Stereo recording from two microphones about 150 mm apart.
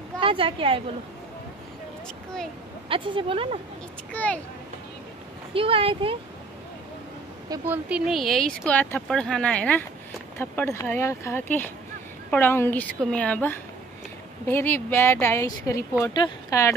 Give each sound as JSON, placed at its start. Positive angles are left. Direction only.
{"t": 0.2, "sound": "a woman's voice", "side_deg": -35}
{"t": 2.9, "sound": "a woman's voice", "side_deg": -35}
{"t": 4.1, "sound": "speech", "side_deg": 10}
{"t": 5.5, "sound": "a woman's voice", "side_deg": -40}
{"t": 7.6, "sound": "a woman's voice", "side_deg": -15}
{"t": 8.1, "sound": "speech", "side_deg": 0}